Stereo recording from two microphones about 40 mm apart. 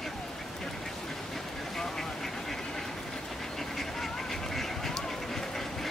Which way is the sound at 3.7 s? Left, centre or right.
Centre.